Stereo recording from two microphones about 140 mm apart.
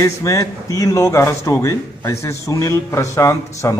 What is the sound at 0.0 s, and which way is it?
A man's voice, 25° left (ahead or behind).